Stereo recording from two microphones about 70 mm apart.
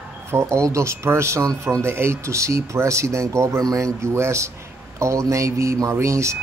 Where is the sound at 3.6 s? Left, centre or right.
Right.